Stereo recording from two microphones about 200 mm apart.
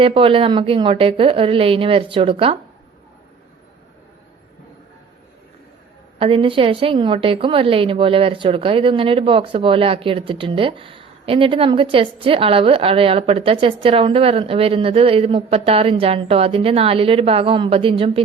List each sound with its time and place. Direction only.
0.0 s a woman's voice: 25° right (ahead or behind)
6.1 s a woman's voice: 25° right (ahead or behind)